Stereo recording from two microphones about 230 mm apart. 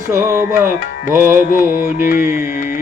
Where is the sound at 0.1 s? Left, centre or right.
Centre.